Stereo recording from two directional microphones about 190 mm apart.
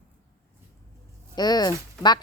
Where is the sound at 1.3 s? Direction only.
20° left (ahead or behind).